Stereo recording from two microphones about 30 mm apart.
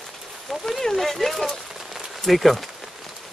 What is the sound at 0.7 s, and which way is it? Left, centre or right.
Speech, centre.